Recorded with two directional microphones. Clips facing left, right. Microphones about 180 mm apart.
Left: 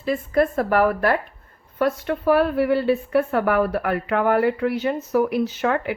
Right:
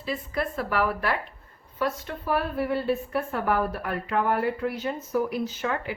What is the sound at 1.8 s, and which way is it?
A woman's voice, 65° left (ahead or behind).